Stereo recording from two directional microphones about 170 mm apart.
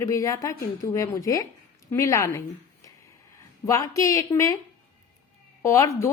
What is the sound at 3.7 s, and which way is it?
Speech, 20° left (ahead or behind).